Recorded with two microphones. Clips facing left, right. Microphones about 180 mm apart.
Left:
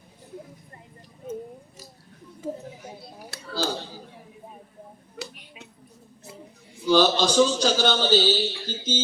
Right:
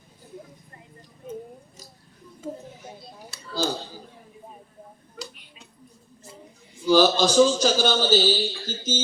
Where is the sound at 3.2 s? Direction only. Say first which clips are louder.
Left 3 dB; 65° left (ahead or behind).